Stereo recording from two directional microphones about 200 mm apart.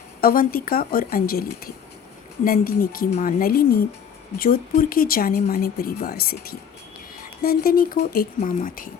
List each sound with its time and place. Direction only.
0.2 s speech: 45° left (ahead or behind)